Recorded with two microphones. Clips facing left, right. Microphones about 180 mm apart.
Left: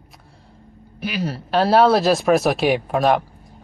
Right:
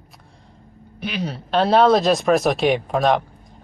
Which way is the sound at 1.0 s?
5° left (ahead or behind).